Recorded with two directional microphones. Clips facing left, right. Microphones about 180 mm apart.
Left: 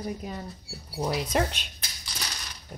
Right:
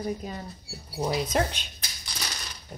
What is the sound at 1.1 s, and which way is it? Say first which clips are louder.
Speech: even; centre (ahead or behind).